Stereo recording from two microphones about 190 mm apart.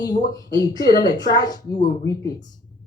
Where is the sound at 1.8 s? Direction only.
60° left (ahead or behind).